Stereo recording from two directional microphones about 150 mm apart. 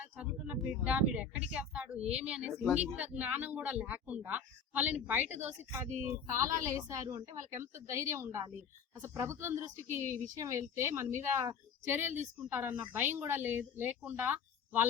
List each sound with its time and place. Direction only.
0.0 s speech: 10° right (ahead or behind)